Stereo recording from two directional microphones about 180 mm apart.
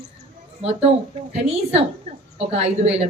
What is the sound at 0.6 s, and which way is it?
Speech, 35° right (ahead or behind).